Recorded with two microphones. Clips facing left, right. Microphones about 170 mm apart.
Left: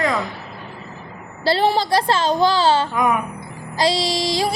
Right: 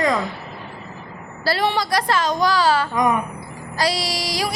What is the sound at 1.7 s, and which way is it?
Music, 30° left (ahead or behind).